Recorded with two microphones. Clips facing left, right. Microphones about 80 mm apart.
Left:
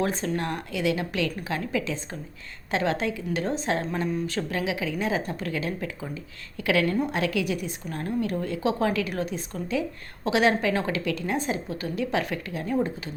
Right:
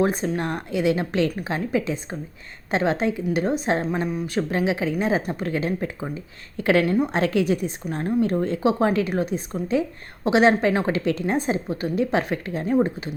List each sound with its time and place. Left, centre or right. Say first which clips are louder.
0.0 s a woman's voice: right 4 dB; centre; by 6.8 s right
6.8 s a woman's voice: right 4 dB; centre
7.1 s a woman's voice: right 5 dB; right